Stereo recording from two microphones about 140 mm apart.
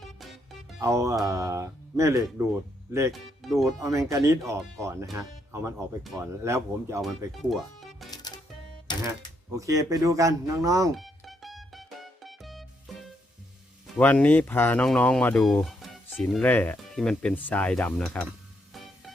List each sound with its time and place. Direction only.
0.0 s music: centre (ahead or behind)
0.8 s speech: 20° right (ahead or behind)
3.1 s speech: centre (ahead or behind)
3.8 s speech: 20° right (ahead or behind)
6.0 s speech: centre (ahead or behind)
6.4 s speech: 20° right (ahead or behind)
7.5 s music: centre (ahead or behind)
9.6 s speech: 25° right (ahead or behind)
10.9 s music: centre (ahead or behind)
14.0 s speech: 10° left (ahead or behind)
18.7 s music: centre (ahead or behind)